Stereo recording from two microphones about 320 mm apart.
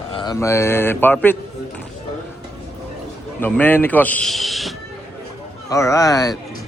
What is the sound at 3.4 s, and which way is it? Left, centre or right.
Speech, centre.